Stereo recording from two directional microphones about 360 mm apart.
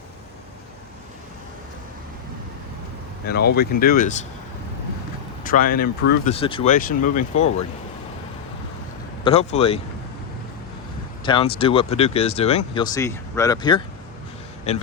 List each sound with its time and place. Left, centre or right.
3.2 s speech: left
5.5 s speech: left
9.2 s speech: centre
11.3 s speech: centre